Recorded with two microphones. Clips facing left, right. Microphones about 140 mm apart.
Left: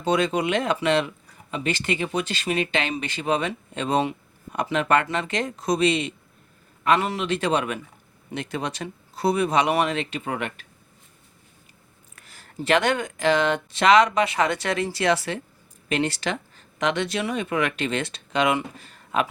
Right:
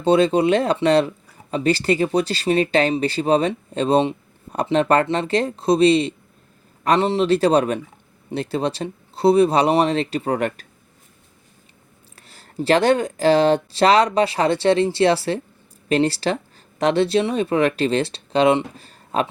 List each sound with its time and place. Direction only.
0.0 s speech: 30° right (ahead or behind)
12.1 s speech: 30° right (ahead or behind)